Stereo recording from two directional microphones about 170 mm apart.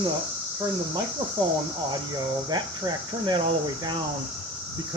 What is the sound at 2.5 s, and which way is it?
Speech, 25° right (ahead or behind).